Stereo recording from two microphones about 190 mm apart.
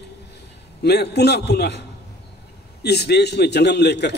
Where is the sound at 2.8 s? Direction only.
60° left (ahead or behind).